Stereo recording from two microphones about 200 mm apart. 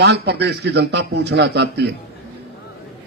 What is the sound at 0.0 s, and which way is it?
A man's voice, 55° right (ahead or behind).